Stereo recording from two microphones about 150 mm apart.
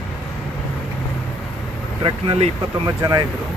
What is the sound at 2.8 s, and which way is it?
Speech, 25° right (ahead or behind).